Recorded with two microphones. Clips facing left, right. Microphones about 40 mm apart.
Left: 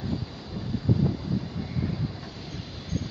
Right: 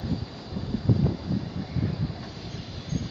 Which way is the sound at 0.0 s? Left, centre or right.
Centre.